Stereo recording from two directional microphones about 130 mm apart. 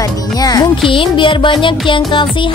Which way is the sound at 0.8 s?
40° left (ahead or behind).